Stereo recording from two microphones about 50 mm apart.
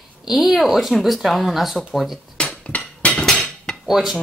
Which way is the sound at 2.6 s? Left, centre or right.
Left.